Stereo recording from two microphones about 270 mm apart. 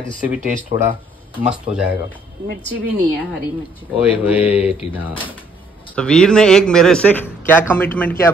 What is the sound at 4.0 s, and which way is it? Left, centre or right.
Speech, centre.